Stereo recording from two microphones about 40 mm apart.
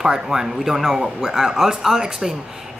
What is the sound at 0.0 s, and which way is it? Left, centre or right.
Speech, centre.